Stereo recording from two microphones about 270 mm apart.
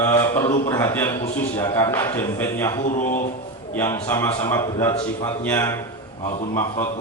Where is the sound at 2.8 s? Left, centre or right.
Left.